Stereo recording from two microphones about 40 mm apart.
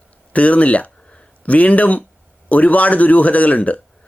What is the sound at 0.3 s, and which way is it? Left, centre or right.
Speech, left.